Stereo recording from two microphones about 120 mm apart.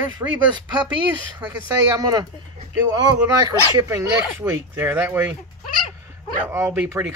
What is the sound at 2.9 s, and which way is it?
Speech, 30° right (ahead or behind).